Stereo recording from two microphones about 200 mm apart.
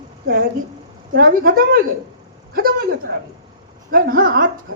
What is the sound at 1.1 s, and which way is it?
A woman's voice, 45° right (ahead or behind).